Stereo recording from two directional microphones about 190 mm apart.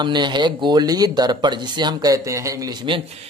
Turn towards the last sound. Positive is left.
turn(degrees=-25)  # may be behind; listen again after turning